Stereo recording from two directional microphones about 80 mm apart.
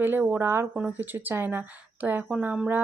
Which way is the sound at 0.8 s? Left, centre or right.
Centre.